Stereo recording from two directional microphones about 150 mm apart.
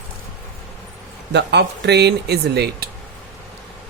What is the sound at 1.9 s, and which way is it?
Speech, 90° right.